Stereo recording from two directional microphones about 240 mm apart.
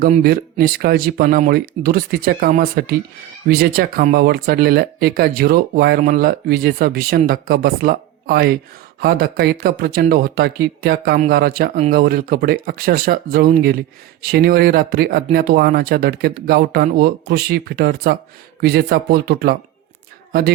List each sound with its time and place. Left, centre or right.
0.0 s speech: right